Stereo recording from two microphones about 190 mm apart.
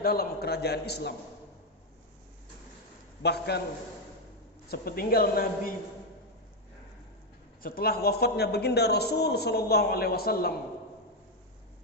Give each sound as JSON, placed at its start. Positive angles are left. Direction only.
{"t": 0.0, "sound": "a man's voice", "side_deg": 50}
{"t": 3.2, "sound": "a man's voice", "side_deg": 60}
{"t": 4.7, "sound": "a woman's voice", "side_deg": 50}
{"t": 7.6, "sound": "a man's voice", "side_deg": 50}